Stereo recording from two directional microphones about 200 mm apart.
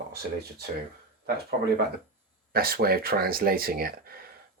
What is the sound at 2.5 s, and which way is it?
Speech, 50° right (ahead or behind).